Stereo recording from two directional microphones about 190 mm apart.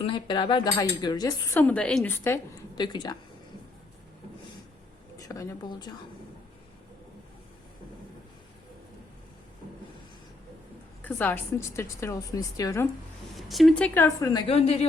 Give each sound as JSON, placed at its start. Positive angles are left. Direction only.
{"t": 0.0, "sound": "speech", "side_deg": 25}
{"t": 5.1, "sound": "speech", "side_deg": 15}
{"t": 11.0, "sound": "a woman's voice", "side_deg": 10}
{"t": 13.3, "sound": "speech", "side_deg": 0}
{"t": 14.4, "sound": "speech", "side_deg": 35}